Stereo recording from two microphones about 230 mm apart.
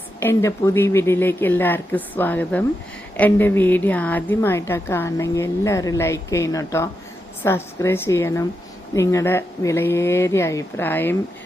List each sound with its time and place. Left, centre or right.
0.2 s a woman's voice: centre